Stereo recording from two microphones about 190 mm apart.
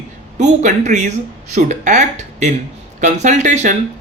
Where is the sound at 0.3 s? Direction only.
40° right (ahead or behind).